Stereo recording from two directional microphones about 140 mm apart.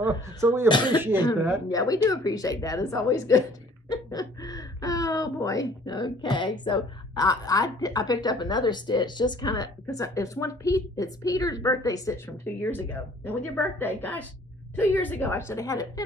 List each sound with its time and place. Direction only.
0.0 s speech: 15° right (ahead or behind)
0.7 s a woman's voice: 35° left (ahead or behind)
12.7 s a woman's voice: 15° left (ahead or behind)